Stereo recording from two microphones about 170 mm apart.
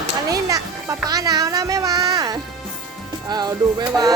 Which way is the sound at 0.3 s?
20° right (ahead or behind).